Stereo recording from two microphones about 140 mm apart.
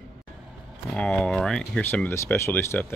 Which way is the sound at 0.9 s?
5° left (ahead or behind).